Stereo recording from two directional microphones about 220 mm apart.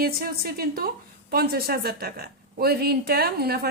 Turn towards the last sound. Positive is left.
turn(degrees=-45)  # may be behind; listen again after turning